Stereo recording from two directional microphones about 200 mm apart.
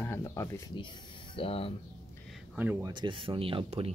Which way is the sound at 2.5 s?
10° right (ahead or behind).